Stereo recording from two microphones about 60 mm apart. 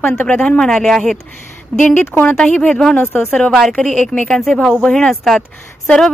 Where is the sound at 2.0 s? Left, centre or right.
Left.